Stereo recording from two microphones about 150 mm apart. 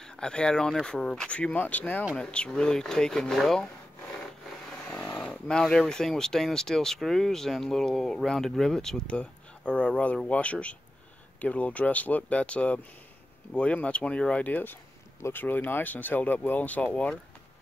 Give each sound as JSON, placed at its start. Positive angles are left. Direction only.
{"t": 0.0, "sound": "speech", "side_deg": 5}
{"t": 4.8, "sound": "a sound", "side_deg": 20}
{"t": 5.2, "sound": "speech", "side_deg": 5}